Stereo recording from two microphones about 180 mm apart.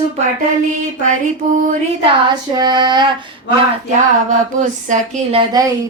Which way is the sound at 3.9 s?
45° right (ahead or behind).